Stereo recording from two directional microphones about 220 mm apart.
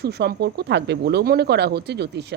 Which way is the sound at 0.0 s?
45° right (ahead or behind).